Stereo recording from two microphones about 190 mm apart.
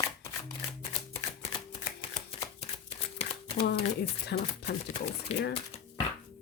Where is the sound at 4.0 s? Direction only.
60° left (ahead or behind).